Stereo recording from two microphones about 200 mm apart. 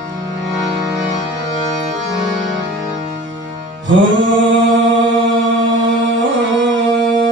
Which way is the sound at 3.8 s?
70° right (ahead or behind).